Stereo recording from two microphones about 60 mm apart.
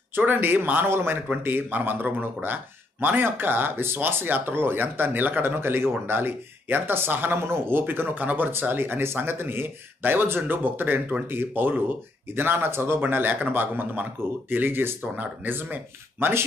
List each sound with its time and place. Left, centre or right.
0.1 s speech: right